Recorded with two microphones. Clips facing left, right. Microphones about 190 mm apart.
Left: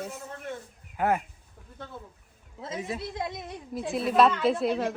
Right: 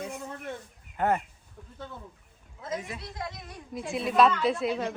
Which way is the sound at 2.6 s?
25° left (ahead or behind).